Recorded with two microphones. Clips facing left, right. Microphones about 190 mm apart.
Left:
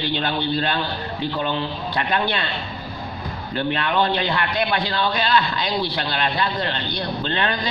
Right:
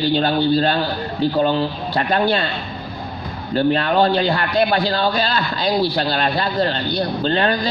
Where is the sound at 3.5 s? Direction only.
35° right (ahead or behind).